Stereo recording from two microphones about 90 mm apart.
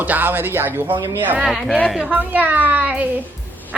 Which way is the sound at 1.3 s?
5° right (ahead or behind).